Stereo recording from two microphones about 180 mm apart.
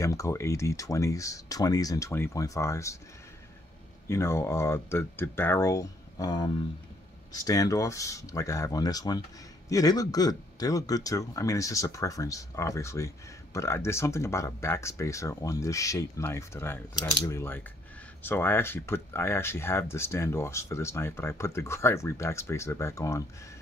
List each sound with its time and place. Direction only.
0.0 s speech: 15° left (ahead or behind)
4.1 s speech: 15° left (ahead or behind)